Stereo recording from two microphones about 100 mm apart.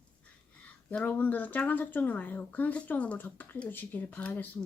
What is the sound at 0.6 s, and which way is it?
Speech, 15° left (ahead or behind).